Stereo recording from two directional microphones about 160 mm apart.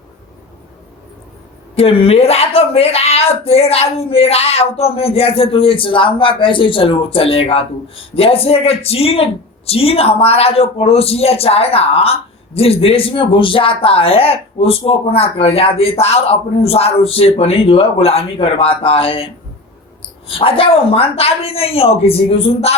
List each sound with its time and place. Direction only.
1.7 s speech: 35° left (ahead or behind)